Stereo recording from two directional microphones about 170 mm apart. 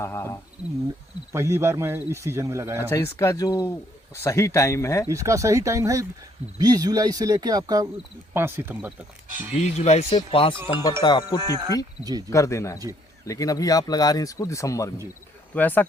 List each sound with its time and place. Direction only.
0.0 s speech: 15° left (ahead or behind)
1.3 s speech: 15° right (ahead or behind)
2.9 s speech: 15° left (ahead or behind)
5.0 s speech: 15° right (ahead or behind)
9.6 s speech: 40° left (ahead or behind)
11.4 s speech: 20° right (ahead or behind)
12.3 s speech: 20° left (ahead or behind)